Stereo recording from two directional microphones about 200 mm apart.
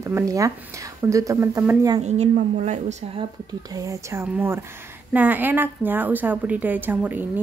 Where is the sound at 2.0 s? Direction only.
35° right (ahead or behind).